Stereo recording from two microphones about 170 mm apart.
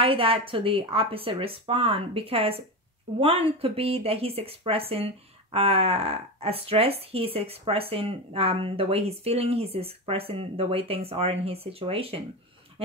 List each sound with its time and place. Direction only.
0.0 s a woman's voice: 35° right (ahead or behind)